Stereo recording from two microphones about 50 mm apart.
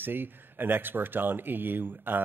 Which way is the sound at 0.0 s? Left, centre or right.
Right.